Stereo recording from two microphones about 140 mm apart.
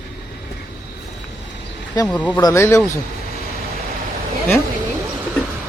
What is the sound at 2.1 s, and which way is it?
Speech, 10° left (ahead or behind).